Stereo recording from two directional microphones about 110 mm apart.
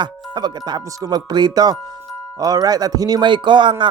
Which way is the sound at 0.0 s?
40° right (ahead or behind).